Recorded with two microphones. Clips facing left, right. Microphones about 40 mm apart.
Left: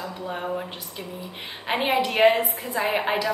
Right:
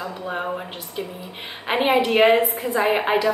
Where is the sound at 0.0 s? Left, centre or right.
Right.